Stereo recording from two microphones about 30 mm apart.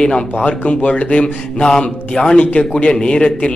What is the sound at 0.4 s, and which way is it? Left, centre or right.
Speech, left.